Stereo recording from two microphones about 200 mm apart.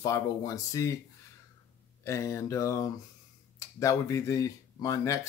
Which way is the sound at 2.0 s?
15° left (ahead or behind).